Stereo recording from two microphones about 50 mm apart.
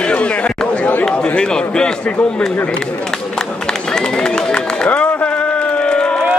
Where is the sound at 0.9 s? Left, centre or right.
Left.